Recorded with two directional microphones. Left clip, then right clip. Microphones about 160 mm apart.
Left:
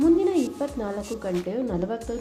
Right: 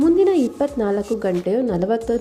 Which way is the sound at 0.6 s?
40° right (ahead or behind).